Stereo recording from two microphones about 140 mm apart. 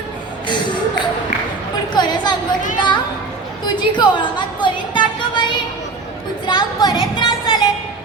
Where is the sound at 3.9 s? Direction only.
35° left (ahead or behind).